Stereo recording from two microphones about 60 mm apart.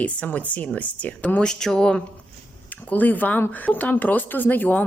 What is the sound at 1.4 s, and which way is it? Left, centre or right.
Speech, centre.